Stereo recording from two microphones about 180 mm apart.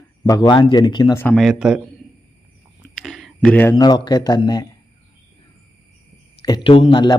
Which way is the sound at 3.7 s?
20° left (ahead or behind).